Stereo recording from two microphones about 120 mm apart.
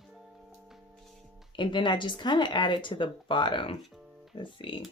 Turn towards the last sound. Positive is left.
turn(degrees=45)  # may be behind; listen again after turning